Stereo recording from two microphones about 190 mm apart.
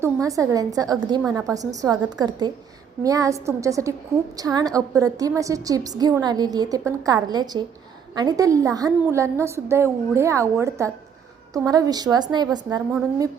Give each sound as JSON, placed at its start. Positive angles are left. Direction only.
{"t": 0.0, "sound": "a woman's voice", "side_deg": -15}